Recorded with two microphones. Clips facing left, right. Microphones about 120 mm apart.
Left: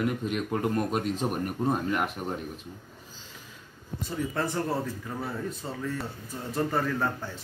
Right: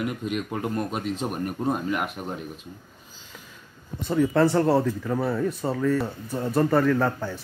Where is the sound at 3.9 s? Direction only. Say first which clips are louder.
Right 10 dB; 70° right (ahead or behind).